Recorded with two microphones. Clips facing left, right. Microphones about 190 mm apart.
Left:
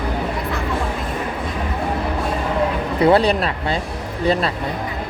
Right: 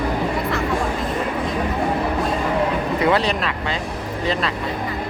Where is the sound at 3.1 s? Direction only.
35° left (ahead or behind).